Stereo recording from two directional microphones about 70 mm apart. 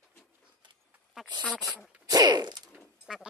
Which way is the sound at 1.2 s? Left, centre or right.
Centre.